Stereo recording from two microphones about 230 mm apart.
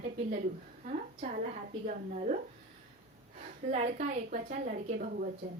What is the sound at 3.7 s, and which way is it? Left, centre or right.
A woman's voice, right.